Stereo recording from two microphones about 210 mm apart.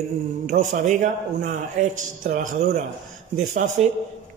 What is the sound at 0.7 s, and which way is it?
A man's voice, 35° right (ahead or behind).